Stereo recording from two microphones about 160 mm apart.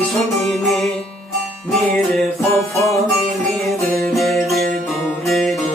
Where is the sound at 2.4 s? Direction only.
15° left (ahead or behind).